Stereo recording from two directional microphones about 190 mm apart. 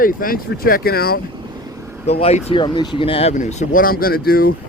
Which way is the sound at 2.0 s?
35° left (ahead or behind).